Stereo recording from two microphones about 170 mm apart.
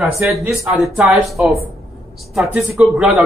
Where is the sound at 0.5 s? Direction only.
5° right (ahead or behind).